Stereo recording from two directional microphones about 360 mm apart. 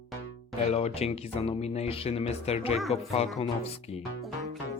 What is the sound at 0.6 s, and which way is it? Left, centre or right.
Speech, centre.